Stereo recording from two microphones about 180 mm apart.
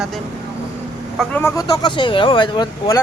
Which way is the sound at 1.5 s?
20° left (ahead or behind).